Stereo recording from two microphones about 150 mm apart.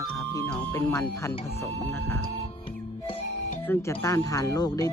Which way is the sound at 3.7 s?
20° left (ahead or behind).